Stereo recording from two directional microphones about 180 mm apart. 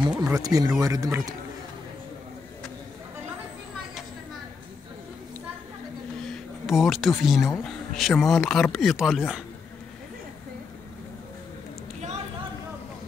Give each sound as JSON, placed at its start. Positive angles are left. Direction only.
{"t": 0.2, "sound": "speech", "side_deg": -20}
{"t": 6.2, "sound": "speech", "side_deg": 0}